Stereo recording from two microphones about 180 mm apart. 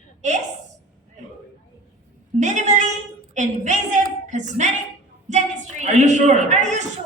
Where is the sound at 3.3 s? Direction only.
40° right (ahead or behind).